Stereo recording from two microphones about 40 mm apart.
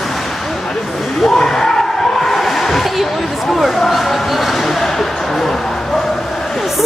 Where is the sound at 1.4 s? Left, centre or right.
Centre.